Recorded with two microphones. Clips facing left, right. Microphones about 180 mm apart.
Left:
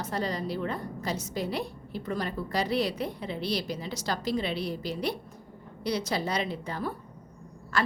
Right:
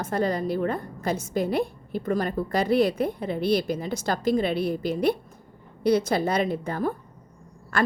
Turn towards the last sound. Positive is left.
turn(degrees=-55)  # may be behind; listen again after turning